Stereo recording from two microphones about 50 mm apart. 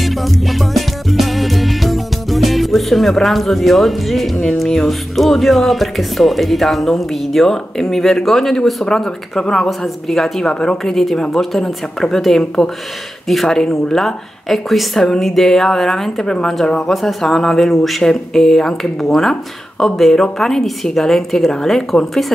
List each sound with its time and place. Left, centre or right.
0.0 s music: centre
4.6 s speech: centre
10.5 s speech: centre
10.8 s speech: centre